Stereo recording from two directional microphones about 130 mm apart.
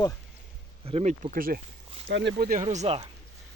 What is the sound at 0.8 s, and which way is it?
Speech, 55° right (ahead or behind).